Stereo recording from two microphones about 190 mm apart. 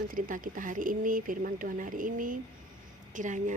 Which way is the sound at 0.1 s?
45° right (ahead or behind).